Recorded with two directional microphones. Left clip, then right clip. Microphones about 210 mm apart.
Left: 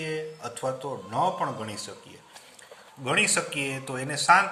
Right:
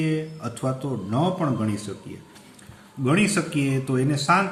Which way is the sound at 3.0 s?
15° left (ahead or behind).